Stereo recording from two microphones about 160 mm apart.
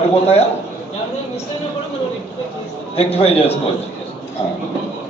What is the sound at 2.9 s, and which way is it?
Speech, 40° left (ahead or behind).